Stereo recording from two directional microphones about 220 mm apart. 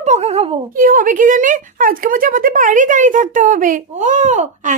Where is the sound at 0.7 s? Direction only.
40° right (ahead or behind).